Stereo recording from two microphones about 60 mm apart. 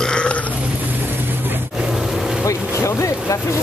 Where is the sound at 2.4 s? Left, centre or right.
Left.